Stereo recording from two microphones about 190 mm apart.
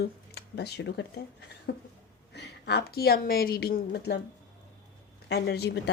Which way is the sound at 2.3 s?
60° left (ahead or behind).